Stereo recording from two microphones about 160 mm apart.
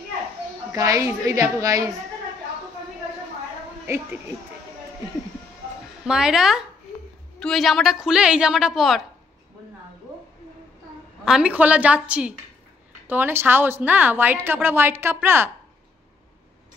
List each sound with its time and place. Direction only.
0.7 s a woman's voice: 20° right (ahead or behind)
3.8 s a woman's voice: 15° right (ahead or behind)
6.0 s a woman's voice: 5° right (ahead or behind)
11.2 s a woman's voice: 5° right (ahead or behind)